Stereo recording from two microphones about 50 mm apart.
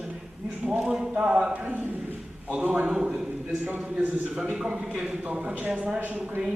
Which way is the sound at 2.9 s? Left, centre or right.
Centre.